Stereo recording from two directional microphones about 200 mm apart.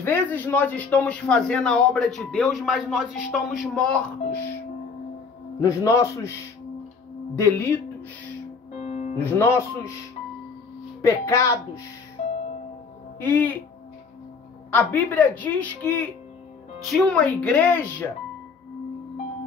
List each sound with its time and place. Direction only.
0.0 s speech: 10° left (ahead or behind)
5.6 s a woman's voice: 15° left (ahead or behind)
7.3 s a woman's voice: 15° left (ahead or behind)
8.7 s music: 35° left (ahead or behind)
9.2 s a woman's voice: 10° left (ahead or behind)
11.0 s a woman's voice: 15° left (ahead or behind)
13.2 s a woman's voice: 10° left (ahead or behind)
14.7 s a woman's voice: 10° left (ahead or behind)